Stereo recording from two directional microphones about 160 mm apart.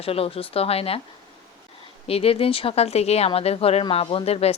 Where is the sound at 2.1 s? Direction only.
35° left (ahead or behind).